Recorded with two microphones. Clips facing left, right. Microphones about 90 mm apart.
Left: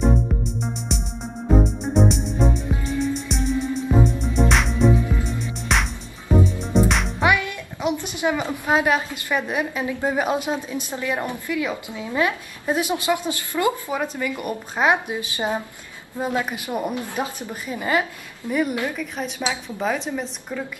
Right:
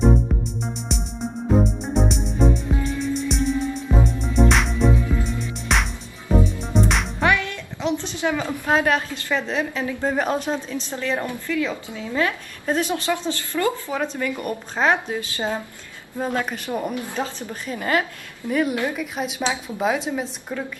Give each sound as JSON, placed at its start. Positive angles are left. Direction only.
{"t": 0.3, "sound": "music", "side_deg": 0}
{"t": 7.2, "sound": "a woman's voice", "side_deg": 15}
{"t": 18.8, "sound": "a woman's voice", "side_deg": -15}
{"t": 19.1, "sound": "a woman's voice", "side_deg": -5}